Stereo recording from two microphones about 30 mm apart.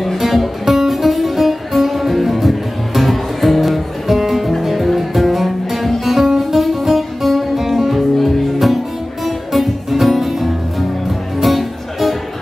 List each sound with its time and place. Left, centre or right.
0.2 s music: centre